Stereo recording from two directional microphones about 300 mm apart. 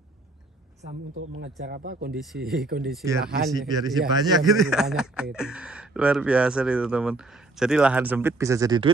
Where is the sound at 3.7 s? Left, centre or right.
Centre.